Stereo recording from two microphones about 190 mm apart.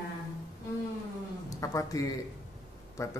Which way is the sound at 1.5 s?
15° left (ahead or behind).